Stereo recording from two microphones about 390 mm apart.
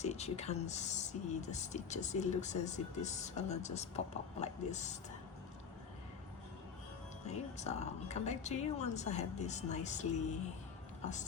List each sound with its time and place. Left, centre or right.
0.0 s speech: centre
7.3 s speech: centre